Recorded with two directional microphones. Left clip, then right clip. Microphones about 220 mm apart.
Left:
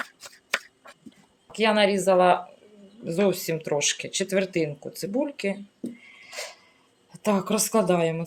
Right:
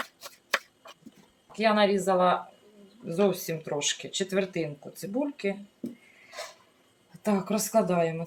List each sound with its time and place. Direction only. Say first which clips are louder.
1.5 s speech: left 2 dB; 45° left (ahead or behind)
6.4 s a sound: left 4 dB; 40° left (ahead or behind)
7.1 s speech: left 4 dB; 40° left (ahead or behind)